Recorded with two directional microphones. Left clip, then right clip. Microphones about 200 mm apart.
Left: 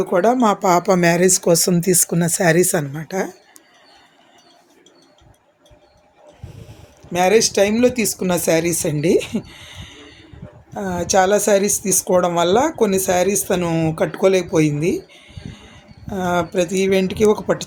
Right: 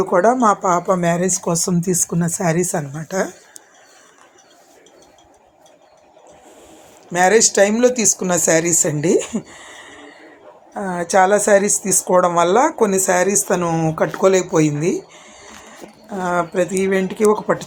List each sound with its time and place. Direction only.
0.0 s speech: 10° left (ahead or behind)
0.9 s speech: 55° left (ahead or behind)
1.5 s speech: 40° left (ahead or behind)
2.0 s speech: 50° left (ahead or behind)
2.2 s speech: 35° left (ahead or behind)
3.0 s speech: 10° left (ahead or behind)
7.1 s speech: 15° left (ahead or behind)
10.8 s speech: 5° left (ahead or behind)
13.7 s speech: 25° left (ahead or behind)
13.9 s speech: 5° left (ahead or behind)
16.0 s speech: 20° left (ahead or behind)